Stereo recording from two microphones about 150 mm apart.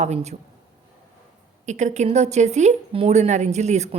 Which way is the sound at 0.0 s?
50° right (ahead or behind).